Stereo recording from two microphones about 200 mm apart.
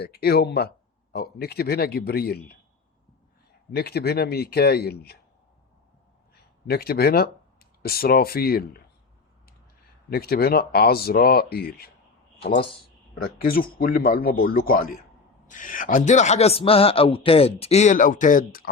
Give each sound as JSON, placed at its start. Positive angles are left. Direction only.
{"t": 0.0, "sound": "speech", "side_deg": 50}
{"t": 3.7, "sound": "speech", "side_deg": 50}
{"t": 6.7, "sound": "speech", "side_deg": 50}
{"t": 10.1, "sound": "speech", "side_deg": 50}
{"t": 13.2, "sound": "speech", "side_deg": 50}